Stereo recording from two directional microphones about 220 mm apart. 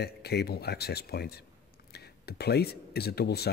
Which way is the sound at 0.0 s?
50° left (ahead or behind).